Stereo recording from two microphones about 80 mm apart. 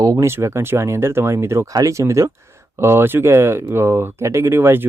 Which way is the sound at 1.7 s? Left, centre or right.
Right.